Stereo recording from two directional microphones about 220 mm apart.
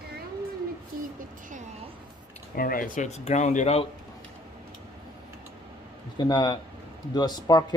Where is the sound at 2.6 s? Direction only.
40° left (ahead or behind).